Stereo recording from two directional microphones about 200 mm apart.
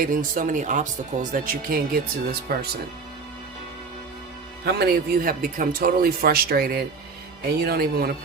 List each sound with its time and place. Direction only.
0.0 s speech: 45° right (ahead or behind)
4.6 s speech: 50° right (ahead or behind)